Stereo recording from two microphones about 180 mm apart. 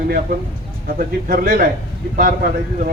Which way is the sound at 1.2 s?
55° right (ahead or behind).